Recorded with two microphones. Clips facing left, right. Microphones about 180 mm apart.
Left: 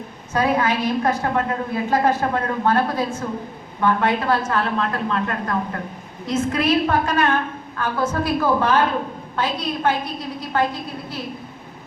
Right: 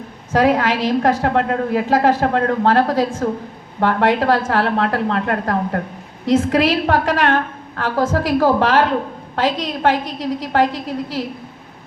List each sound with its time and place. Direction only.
0.3 s a woman's voice: 90° right
6.2 s a woman's voice: 90° right